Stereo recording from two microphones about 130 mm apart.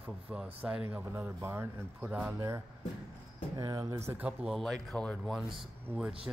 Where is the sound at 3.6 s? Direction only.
25° right (ahead or behind); by 5.3 s 5° left (ahead or behind).